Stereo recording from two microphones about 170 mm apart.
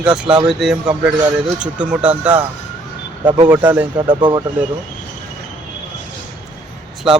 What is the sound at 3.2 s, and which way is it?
Speech, 30° right (ahead or behind).